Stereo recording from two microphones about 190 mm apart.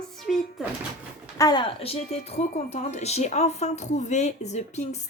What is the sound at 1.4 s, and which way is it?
A woman's voice, 20° left (ahead or behind).